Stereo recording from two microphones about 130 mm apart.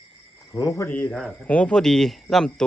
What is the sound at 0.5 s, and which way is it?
Speech, 25° left (ahead or behind).